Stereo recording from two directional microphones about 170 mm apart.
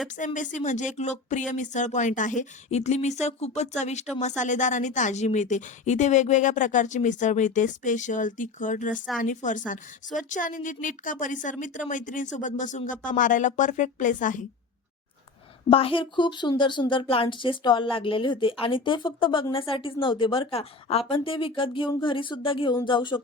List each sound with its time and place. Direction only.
0.3 s a woman's voice: 45° left (ahead or behind)
15.7 s speech: 30° left (ahead or behind)